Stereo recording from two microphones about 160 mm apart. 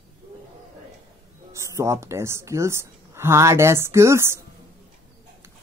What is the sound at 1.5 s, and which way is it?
A woman's voice, 20° right (ahead or behind).